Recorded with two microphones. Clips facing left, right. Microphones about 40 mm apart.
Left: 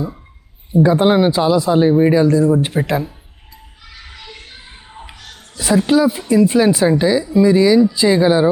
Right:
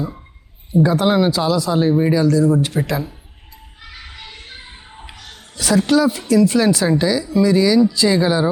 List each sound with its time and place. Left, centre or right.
0.7 s speech: left
2.1 s speech: left
5.5 s speech: left
5.8 s speech: centre